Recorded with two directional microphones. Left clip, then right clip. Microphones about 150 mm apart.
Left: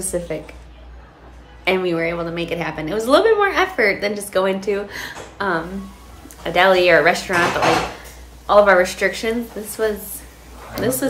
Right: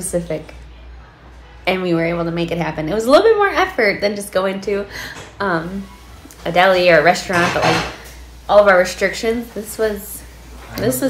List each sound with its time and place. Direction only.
0.1 s a woman's voice: 15° left (ahead or behind)
1.6 s a woman's voice: 15° left (ahead or behind)
8.5 s a woman's voice: 20° left (ahead or behind)